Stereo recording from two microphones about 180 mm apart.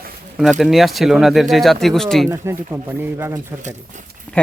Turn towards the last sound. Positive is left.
turn(degrees=-10)  # may be behind; listen again after turning